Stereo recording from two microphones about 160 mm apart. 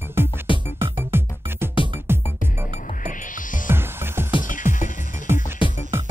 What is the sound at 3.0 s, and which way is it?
Music, 55° left (ahead or behind).